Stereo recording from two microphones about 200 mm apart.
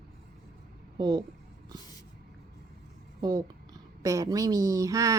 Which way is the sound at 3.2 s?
20° right (ahead or behind).